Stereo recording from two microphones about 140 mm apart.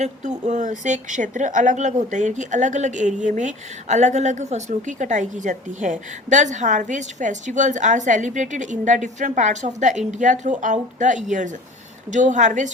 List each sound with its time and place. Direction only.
0.0 s a woman's voice: 60° right (ahead or behind)